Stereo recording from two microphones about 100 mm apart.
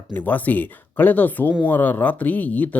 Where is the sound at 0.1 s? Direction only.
20° left (ahead or behind).